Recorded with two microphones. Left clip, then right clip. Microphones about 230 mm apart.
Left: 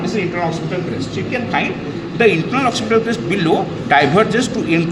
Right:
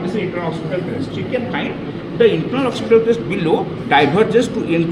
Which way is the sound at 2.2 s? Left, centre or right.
Left.